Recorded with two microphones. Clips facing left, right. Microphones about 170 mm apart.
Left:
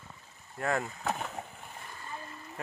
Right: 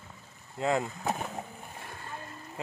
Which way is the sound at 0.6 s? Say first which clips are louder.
Right 3 dB; 20° right (ahead or behind).